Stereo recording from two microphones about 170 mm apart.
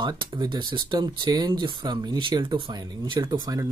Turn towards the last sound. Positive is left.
turn(degrees=-20)  # may be behind; listen again after turning